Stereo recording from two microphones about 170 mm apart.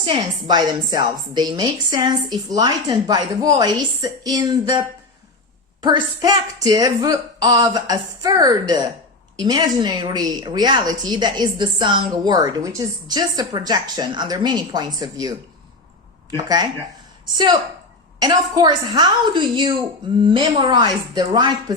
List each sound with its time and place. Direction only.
0.0 s a woman's voice: 30° right (ahead or behind)
5.8 s a woman's voice: 25° right (ahead or behind)